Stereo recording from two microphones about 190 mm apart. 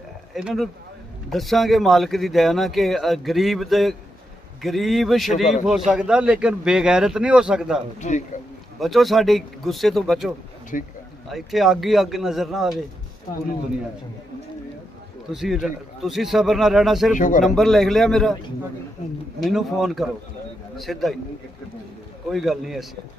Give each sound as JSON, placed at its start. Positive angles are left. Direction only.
{"t": 0.3, "sound": "speech", "side_deg": -5}
{"t": 8.0, "sound": "speech", "side_deg": 40}
{"t": 8.7, "sound": "speech", "side_deg": 0}
{"t": 10.7, "sound": "speech", "side_deg": 45}
{"t": 11.2, "sound": "speech", "side_deg": 0}
{"t": 15.3, "sound": "speech", "side_deg": -5}
{"t": 17.1, "sound": "speech", "side_deg": 40}
{"t": 17.6, "sound": "speech", "side_deg": 0}
{"t": 19.4, "sound": "speech", "side_deg": 0}
{"t": 22.3, "sound": "speech", "side_deg": 0}